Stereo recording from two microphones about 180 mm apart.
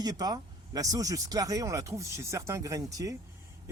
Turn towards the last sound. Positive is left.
turn(degrees=-20)  # may be behind; listen again after turning